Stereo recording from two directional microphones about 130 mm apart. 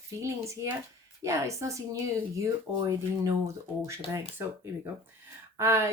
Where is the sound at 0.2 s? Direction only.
25° right (ahead or behind).